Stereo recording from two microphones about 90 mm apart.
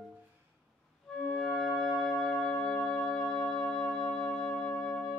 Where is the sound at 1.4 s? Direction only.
5° right (ahead or behind).